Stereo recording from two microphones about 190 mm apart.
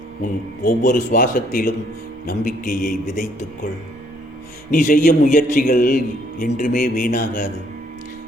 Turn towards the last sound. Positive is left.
turn(degrees=40)  # may be behind; listen again after turning